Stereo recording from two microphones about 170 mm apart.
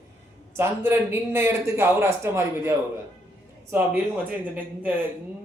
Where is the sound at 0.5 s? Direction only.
15° right (ahead or behind).